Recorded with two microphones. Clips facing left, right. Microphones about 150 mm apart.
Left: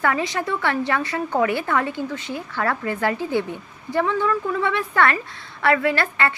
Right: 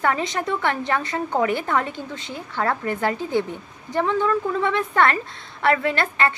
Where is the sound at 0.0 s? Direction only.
25° right (ahead or behind).